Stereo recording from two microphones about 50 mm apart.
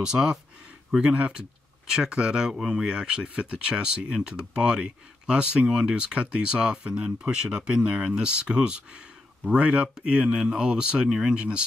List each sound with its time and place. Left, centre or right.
0.0 s speech: centre
2.9 s speech: centre